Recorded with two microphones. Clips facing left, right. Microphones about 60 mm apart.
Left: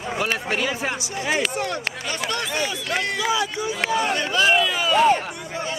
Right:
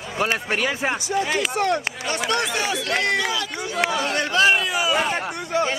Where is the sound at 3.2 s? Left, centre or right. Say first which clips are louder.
Left 3 dB; centre.